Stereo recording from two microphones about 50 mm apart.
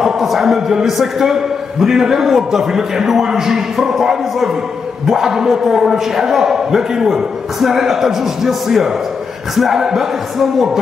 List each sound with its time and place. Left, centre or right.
0.0 s a man's voice: centre